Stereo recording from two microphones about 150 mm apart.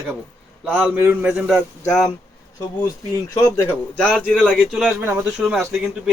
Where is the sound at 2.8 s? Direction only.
25° left (ahead or behind).